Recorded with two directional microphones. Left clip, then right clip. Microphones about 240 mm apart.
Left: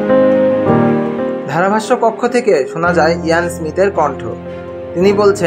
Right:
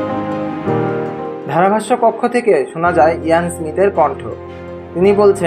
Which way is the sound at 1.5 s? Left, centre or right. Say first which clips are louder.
Right 1 dB; centre.